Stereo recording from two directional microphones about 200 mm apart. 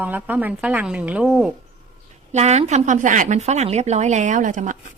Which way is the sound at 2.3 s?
35° right (ahead or behind).